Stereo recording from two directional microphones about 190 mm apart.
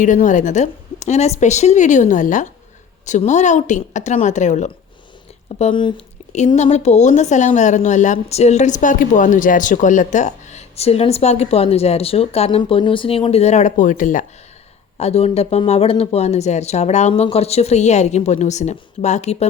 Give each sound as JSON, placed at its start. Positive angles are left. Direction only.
{"t": 0.0, "sound": "a woman's voice", "side_deg": 40}